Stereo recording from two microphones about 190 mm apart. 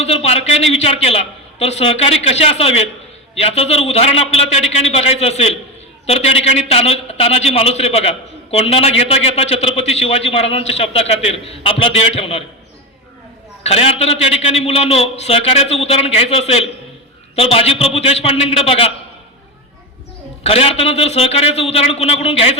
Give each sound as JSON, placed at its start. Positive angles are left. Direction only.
{"t": 0.0, "sound": "a man's voice", "side_deg": 35}
{"t": 13.7, "sound": "a man's voice", "side_deg": 30}
{"t": 20.4, "sound": "a man's voice", "side_deg": 30}